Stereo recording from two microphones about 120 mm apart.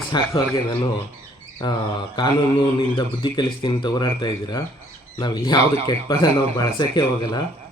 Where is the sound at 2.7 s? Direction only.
40° left (ahead or behind).